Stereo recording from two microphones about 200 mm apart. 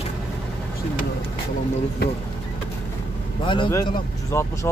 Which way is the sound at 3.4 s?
25° left (ahead or behind).